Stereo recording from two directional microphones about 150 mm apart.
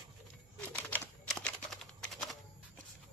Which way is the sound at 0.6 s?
10° left (ahead or behind).